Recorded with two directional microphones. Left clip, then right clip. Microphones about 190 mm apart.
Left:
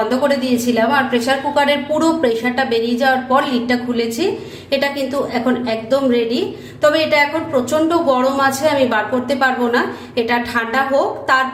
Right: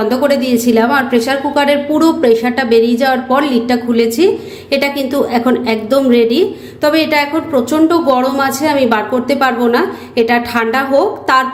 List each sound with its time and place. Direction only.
0.1 s a woman's voice: 35° right (ahead or behind)